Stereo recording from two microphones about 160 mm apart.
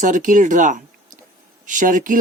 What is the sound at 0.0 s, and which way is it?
Speech, 50° right (ahead or behind).